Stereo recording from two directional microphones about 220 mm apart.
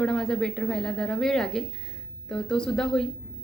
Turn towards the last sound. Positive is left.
turn(degrees=5)  # may be behind; listen again after turning